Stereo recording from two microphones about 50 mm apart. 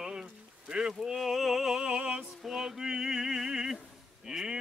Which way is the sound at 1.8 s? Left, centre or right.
Right.